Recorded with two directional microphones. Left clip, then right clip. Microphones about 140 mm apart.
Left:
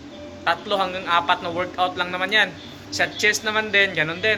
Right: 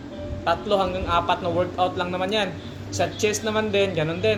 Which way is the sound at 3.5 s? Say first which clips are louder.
Left 3 dB; 35° left (ahead or behind).